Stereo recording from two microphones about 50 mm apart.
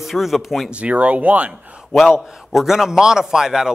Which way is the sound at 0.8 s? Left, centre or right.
Right.